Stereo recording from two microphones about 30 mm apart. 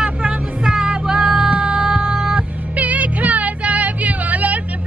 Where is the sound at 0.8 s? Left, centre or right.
Right.